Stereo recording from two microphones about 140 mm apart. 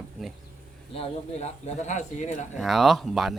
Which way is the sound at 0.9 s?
45° left (ahead or behind).